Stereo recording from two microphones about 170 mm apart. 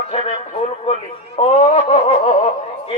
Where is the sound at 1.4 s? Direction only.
35° left (ahead or behind).